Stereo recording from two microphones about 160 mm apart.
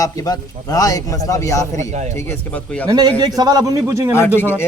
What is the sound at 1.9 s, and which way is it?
Speech, 45° right (ahead or behind).